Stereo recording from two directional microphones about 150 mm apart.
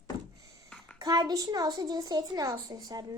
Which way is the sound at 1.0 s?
25° right (ahead or behind).